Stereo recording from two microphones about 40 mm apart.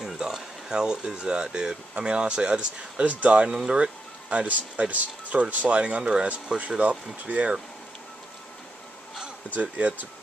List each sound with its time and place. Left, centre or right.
0.0 s speech: centre
3.1 s speech: right
9.6 s speech: right